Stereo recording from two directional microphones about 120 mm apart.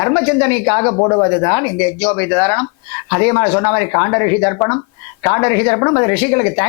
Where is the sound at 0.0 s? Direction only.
25° left (ahead or behind).